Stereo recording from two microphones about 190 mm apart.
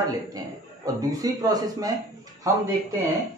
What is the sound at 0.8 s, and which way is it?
Speech, 20° right (ahead or behind).